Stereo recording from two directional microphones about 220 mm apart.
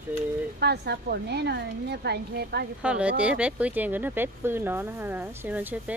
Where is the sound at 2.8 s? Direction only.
5° right (ahead or behind).